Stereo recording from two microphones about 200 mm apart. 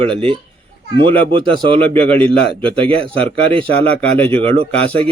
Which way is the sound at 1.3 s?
25° right (ahead or behind).